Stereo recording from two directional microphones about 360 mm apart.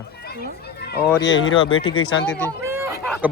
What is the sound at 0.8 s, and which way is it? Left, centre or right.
Run, left.